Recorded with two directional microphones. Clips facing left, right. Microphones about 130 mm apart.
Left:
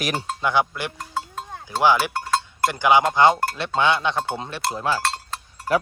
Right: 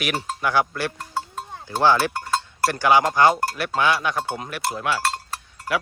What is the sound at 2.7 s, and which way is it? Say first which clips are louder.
Speech: even; 20° left (ahead or behind).